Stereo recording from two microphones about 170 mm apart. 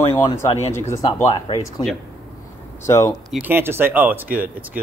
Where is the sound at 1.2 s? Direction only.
20° left (ahead or behind).